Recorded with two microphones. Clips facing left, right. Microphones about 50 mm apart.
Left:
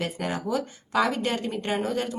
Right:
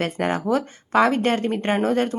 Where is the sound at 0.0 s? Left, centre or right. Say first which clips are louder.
Right 6 dB; right.